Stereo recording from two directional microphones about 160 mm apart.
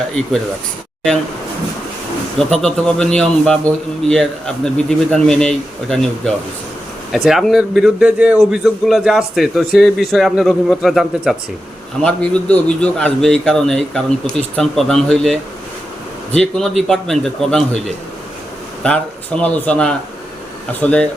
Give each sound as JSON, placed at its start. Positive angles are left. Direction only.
{"t": 2.4, "sound": "a man's voice", "side_deg": 5}
{"t": 18.8, "sound": "speech", "side_deg": 5}